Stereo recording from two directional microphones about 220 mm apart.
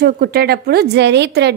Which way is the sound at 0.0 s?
45° right (ahead or behind).